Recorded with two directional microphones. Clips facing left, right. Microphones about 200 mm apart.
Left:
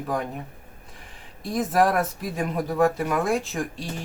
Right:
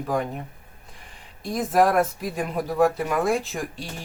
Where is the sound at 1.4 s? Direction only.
Centre (ahead or behind).